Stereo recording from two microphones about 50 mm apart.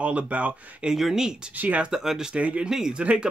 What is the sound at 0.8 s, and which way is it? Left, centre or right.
Speech, centre.